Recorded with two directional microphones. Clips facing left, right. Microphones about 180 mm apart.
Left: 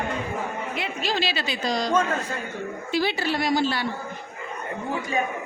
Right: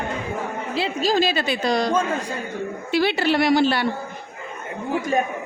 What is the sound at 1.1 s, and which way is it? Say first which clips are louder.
Speech: right 6 dB; 45° right (ahead or behind).